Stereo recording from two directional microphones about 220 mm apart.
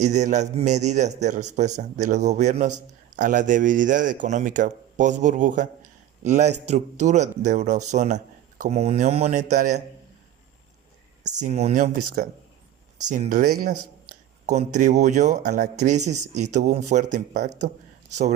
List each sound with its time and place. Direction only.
0.0 s a man's voice: 30° right (ahead or behind)
11.2 s a man's voice: 35° right (ahead or behind)